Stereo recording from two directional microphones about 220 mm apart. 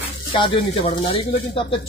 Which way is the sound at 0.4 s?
25° left (ahead or behind).